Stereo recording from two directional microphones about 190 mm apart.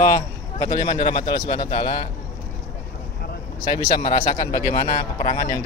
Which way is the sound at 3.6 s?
20° left (ahead or behind).